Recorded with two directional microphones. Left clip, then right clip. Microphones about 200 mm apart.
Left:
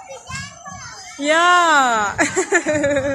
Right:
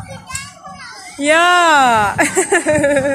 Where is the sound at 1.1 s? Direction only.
10° right (ahead or behind).